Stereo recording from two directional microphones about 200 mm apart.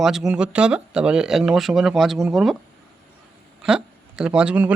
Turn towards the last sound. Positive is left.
turn(degrees=-5)  # may be behind; listen again after turning